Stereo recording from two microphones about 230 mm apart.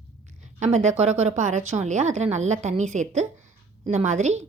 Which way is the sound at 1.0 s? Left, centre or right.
Right.